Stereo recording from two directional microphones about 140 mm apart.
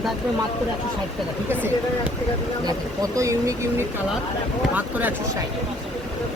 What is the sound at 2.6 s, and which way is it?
Speech, 25° right (ahead or behind).